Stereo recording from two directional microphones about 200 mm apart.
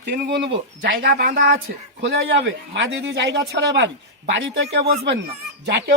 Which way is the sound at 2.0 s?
65° right (ahead or behind).